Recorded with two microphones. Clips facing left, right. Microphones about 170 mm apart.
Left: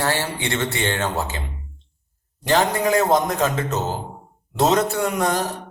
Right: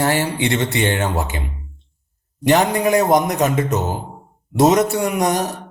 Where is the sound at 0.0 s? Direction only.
20° right (ahead or behind).